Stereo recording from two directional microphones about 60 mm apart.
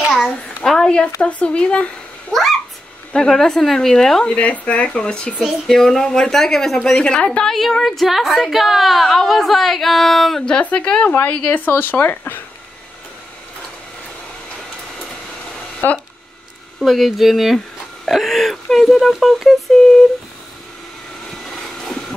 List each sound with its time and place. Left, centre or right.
0.7 s a sound: centre
1.2 s speech: centre
2.3 s a woman's voice: centre
3.1 s speech: centre
4.3 s a woman's voice: left
11.2 s speech: left
15.8 s speech: left
16.8 s a woman's voice: centre